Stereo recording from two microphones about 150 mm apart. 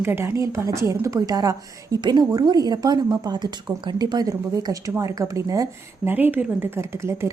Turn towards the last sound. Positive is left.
turn(degrees=-20)  # may be behind; listen again after turning